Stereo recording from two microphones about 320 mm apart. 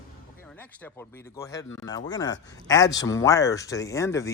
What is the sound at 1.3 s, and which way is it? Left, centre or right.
A man's voice, centre.